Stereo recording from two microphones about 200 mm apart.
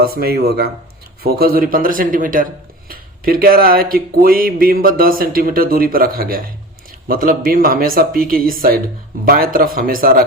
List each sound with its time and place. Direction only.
0.0 s speech: 50° right (ahead or behind)